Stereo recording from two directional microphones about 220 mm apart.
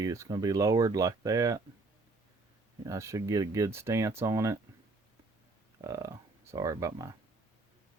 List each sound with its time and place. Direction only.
0.0 s speech: 15° right (ahead or behind)
2.8 s speech: 15° right (ahead or behind)
5.8 s speech: 15° right (ahead or behind)